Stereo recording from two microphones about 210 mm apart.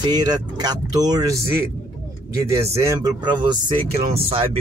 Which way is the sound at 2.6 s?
15° right (ahead or behind).